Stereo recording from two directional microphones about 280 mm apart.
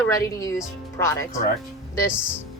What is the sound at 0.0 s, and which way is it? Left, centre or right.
Speech, centre.